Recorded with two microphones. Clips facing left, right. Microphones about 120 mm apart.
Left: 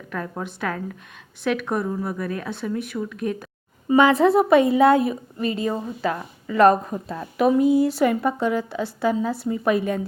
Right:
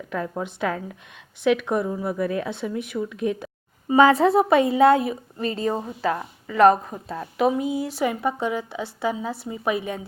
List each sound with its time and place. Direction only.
0.1 s speech: 20° right (ahead or behind)
5.5 s a woman's voice: 15° left (ahead or behind)
5.7 s a woman's voice: 25° right (ahead or behind)